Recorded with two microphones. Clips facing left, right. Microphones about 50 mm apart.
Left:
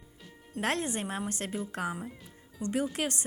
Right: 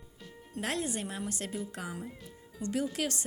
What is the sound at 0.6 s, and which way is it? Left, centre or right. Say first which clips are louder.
Speech: left 3 dB; left.